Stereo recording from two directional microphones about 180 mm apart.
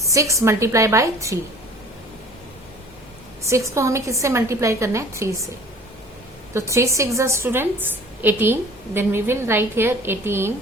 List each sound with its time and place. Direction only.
0.0 s a woman's voice: 15° right (ahead or behind)
3.4 s a woman's voice: 15° right (ahead or behind)
6.5 s a woman's voice: 15° right (ahead or behind)